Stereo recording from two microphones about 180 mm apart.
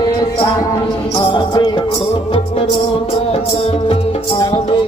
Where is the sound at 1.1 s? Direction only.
25° left (ahead or behind).